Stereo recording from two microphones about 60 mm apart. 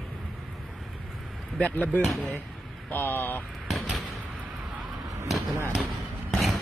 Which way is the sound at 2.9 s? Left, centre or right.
Left.